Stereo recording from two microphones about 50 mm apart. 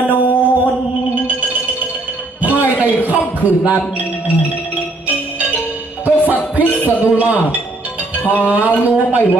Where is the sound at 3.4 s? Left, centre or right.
Right.